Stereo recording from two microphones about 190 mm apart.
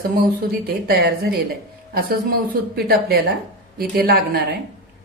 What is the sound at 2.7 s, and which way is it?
A woman's voice, 55° right (ahead or behind).